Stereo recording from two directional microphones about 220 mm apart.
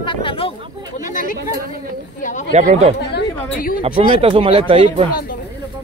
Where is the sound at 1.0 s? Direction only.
35° left (ahead or behind).